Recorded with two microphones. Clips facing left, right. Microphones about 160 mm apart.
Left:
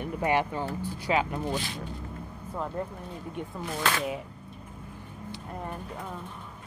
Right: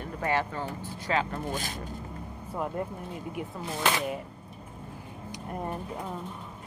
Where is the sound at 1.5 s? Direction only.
45° right (ahead or behind).